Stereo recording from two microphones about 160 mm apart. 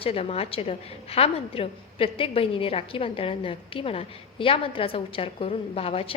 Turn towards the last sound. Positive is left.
turn(degrees=35)  # may be behind; listen again after turning